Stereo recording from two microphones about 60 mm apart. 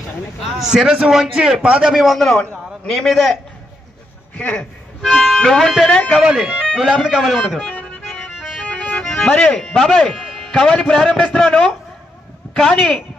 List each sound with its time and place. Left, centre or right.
0.6 s a man's voice: centre
2.0 s a man's voice: centre
4.4 s speech: left
5.0 s speech: centre
5.9 s a man's voice: centre
6.1 s a man's voice: centre
8.6 s music: left; by 10.5 s centre
10.5 s a man's voice: centre